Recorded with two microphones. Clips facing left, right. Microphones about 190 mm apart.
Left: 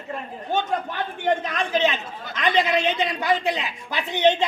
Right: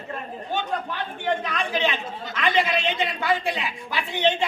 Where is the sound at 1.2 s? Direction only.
45° left (ahead or behind).